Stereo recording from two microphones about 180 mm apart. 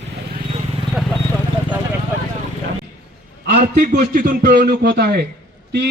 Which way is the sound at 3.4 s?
45° right (ahead or behind).